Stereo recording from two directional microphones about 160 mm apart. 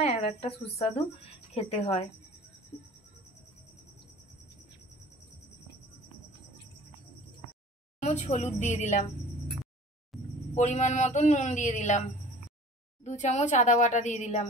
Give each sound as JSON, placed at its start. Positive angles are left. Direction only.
{"t": 0.0, "sound": "speech", "side_deg": 45}
{"t": 8.0, "sound": "a man's voice", "side_deg": 45}
{"t": 10.1, "sound": "a sound", "side_deg": 0}
{"t": 10.5, "sound": "a man's voice", "side_deg": 45}
{"t": 13.0, "sound": "a man's voice", "side_deg": 45}